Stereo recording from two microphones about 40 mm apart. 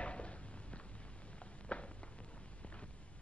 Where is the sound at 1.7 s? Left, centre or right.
Left.